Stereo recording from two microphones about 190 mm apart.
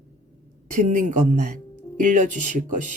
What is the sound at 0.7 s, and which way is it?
Speech, 45° right (ahead or behind).